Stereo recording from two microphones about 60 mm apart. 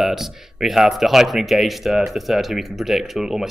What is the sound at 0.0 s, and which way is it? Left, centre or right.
Speech, centre.